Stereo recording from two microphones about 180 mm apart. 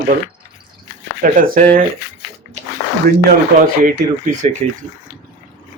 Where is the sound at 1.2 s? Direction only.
50° right (ahead or behind).